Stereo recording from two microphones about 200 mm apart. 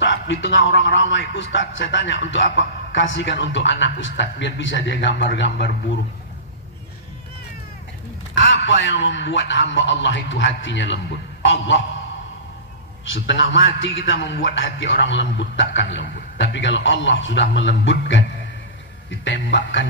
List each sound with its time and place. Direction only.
0.0 s a man's voice: 70° left (ahead or behind)
8.4 s a man's voice: 65° left (ahead or behind)
13.1 s a man's voice: 70° left (ahead or behind)